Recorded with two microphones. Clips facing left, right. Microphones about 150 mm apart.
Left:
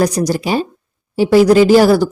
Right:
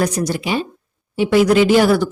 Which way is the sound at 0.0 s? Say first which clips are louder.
Left 4 dB; 35° left (ahead or behind).